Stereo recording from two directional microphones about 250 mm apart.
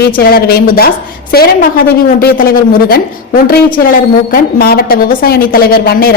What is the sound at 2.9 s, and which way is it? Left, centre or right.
A woman's voice, left.